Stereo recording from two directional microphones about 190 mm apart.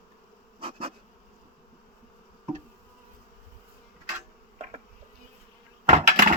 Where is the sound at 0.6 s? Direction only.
30° right (ahead or behind).